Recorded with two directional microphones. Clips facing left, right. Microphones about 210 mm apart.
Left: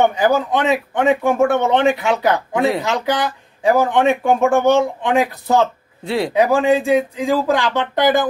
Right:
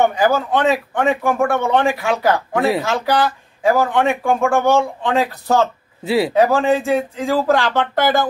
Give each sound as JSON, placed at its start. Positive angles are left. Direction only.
{"t": 0.2, "sound": "speech", "side_deg": 15}
{"t": 6.0, "sound": "speech", "side_deg": -5}
{"t": 6.3, "sound": "speech", "side_deg": 15}